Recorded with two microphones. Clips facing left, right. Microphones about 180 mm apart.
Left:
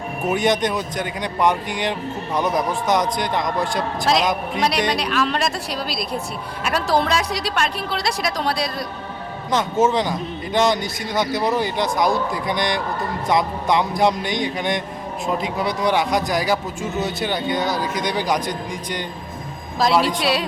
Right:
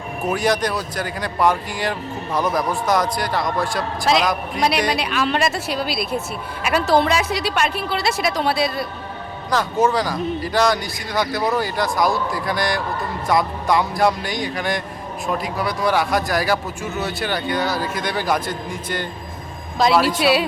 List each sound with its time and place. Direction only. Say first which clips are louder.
0.3 s speech: left 1 dB; 20° left (ahead or behind)
4.0 s a woman's voice: right 1 dB; centre (ahead or behind)
9.8 s speech: right 1 dB; 20° left (ahead or behind)
19.8 s a woman's voice: right 2 dB; centre (ahead or behind)